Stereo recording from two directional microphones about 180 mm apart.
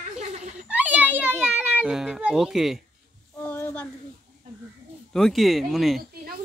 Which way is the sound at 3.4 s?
10° left (ahead or behind).